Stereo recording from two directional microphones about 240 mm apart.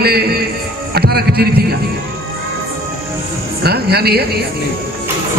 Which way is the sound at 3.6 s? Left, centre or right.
Right.